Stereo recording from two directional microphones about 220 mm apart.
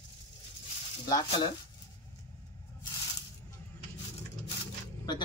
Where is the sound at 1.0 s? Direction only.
20° left (ahead or behind).